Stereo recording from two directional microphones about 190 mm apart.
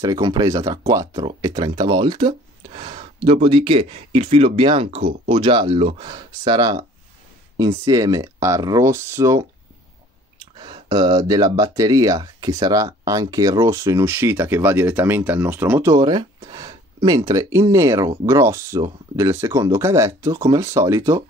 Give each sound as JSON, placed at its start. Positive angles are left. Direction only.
{"t": 0.0, "sound": "speech", "side_deg": -20}
{"t": 10.6, "sound": "speech", "side_deg": -25}
{"t": 15.9, "sound": "speech", "side_deg": -20}